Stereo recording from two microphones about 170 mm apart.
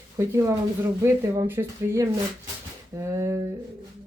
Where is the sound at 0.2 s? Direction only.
15° right (ahead or behind).